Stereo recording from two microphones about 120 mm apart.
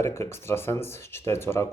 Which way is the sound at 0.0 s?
20° left (ahead or behind).